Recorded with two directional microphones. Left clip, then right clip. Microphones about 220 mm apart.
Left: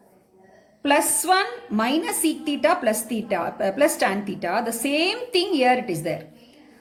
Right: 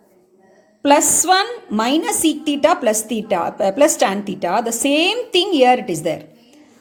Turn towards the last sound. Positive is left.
turn(degrees=-35)  # may be behind; listen again after turning